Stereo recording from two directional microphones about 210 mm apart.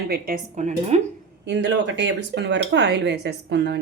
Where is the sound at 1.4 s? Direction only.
55° right (ahead or behind).